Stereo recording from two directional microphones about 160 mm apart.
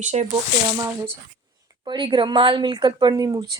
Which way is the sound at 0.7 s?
20° right (ahead or behind).